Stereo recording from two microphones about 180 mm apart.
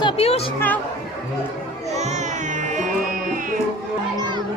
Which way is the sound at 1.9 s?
40° right (ahead or behind).